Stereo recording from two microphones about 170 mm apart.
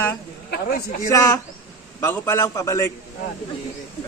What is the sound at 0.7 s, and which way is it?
Speech, 45° left (ahead or behind).